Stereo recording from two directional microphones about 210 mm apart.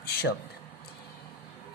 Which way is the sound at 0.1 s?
50° left (ahead or behind).